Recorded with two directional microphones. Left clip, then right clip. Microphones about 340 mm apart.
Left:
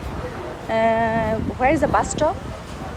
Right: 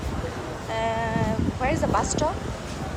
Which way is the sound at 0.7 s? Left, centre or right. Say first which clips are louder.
Left 8 dB; centre.